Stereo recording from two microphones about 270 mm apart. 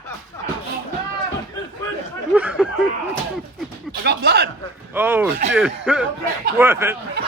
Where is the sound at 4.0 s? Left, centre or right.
Right.